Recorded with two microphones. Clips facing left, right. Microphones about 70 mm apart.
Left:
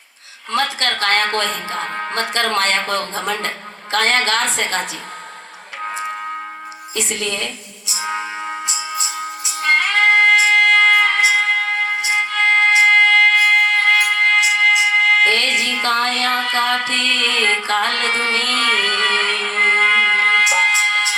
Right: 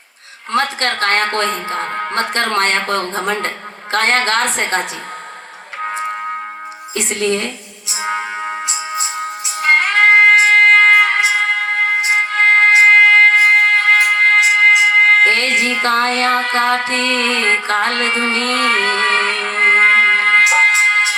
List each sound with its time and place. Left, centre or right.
0.5 s speech: right
6.9 s speech: right
7.9 s music: right
13.3 s music: right